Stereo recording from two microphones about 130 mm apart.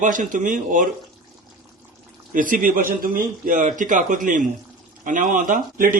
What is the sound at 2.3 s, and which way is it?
A man's voice, 90° right.